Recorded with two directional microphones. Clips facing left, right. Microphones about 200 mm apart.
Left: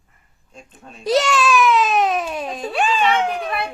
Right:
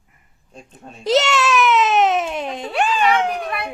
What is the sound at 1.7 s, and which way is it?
Baby cry, 25° right (ahead or behind).